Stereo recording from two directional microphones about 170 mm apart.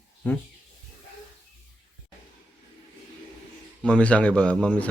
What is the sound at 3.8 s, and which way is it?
A man's voice, 5° left (ahead or behind).